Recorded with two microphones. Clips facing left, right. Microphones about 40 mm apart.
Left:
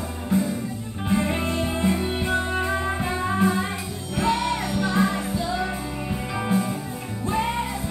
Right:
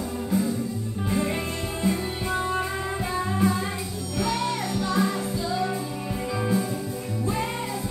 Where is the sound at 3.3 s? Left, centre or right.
Left.